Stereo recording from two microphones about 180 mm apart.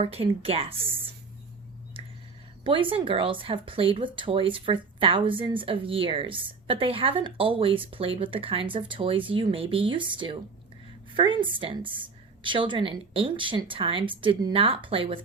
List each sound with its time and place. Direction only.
0.0 s speech: 35° right (ahead or behind)
2.6 s speech: 30° right (ahead or behind)